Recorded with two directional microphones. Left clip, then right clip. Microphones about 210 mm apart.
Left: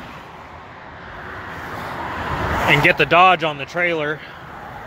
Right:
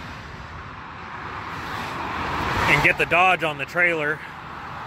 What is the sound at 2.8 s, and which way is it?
Speech, 25° left (ahead or behind).